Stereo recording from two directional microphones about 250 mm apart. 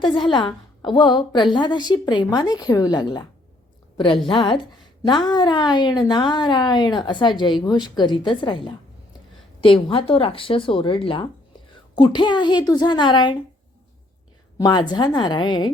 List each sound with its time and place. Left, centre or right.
0.0 s a woman's voice: centre
14.6 s a woman's voice: centre